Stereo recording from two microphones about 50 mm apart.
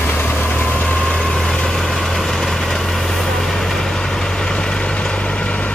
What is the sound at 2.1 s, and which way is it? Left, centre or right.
Vehicle, centre.